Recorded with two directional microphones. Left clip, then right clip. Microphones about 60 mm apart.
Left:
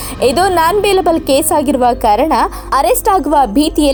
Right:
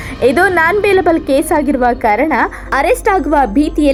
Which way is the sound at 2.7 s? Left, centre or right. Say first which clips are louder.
Left 1 dB; centre.